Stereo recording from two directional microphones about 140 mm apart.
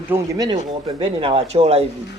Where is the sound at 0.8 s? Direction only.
40° right (ahead or behind).